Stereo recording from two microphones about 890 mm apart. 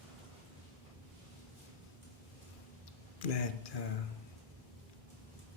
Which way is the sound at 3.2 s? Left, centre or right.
Left.